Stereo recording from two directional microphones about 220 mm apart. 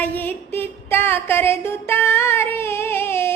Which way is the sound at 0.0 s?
10° left (ahead or behind).